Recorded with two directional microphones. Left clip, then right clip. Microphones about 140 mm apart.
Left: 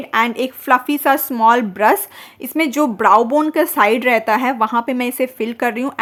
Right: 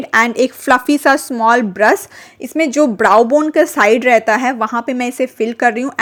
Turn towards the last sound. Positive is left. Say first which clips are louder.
# right 5 dB
turn(degrees=-10)  # may be behind; listen again after turning